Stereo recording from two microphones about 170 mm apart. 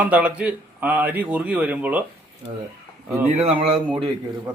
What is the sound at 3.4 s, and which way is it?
Speech, 35° right (ahead or behind).